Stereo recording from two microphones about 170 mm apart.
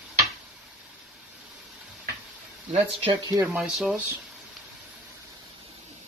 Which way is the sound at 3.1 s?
20° right (ahead or behind).